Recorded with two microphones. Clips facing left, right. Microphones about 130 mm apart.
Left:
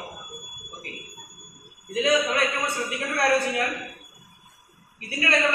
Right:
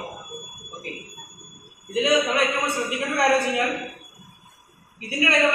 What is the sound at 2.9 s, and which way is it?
Speech, 15° right (ahead or behind).